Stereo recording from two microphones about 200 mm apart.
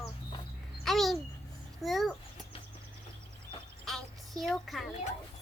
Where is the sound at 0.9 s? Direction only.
Centre (ahead or behind).